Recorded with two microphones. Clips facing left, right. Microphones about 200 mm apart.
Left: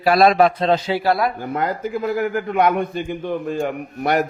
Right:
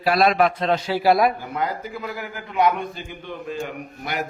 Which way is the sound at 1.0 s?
10° right (ahead or behind).